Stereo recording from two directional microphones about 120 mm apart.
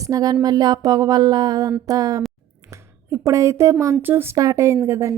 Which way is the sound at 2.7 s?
25° right (ahead or behind).